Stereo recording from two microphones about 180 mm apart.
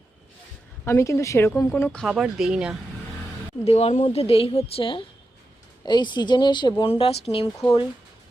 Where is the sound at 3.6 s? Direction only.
35° left (ahead or behind).